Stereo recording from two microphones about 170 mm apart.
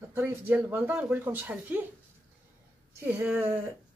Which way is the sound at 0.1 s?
10° right (ahead or behind).